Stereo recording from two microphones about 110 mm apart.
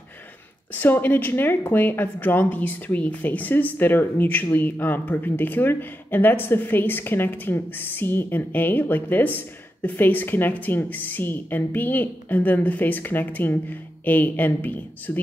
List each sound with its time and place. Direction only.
0.7 s a woman's voice: 15° left (ahead or behind)